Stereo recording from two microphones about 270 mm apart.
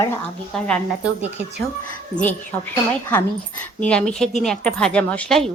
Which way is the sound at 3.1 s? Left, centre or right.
Centre.